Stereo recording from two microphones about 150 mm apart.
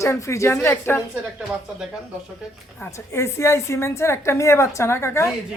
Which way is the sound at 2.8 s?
20° left (ahead or behind).